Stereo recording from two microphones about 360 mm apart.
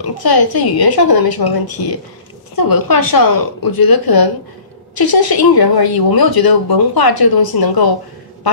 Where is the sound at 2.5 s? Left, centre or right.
Left.